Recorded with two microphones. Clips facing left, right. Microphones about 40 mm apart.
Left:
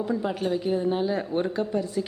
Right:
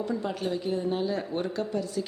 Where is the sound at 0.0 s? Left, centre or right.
Centre.